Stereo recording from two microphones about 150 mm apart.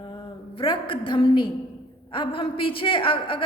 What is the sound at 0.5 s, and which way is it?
A woman's voice, 35° left (ahead or behind).